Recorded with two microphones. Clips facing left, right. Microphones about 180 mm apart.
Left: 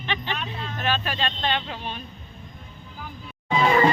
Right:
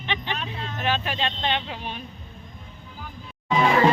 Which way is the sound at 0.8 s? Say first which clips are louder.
Right 1 dB; 15° right (ahead or behind).